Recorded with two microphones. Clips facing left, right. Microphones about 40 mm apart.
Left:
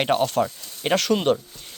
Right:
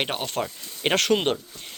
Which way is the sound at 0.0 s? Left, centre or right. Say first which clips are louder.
Left 7 dB; centre.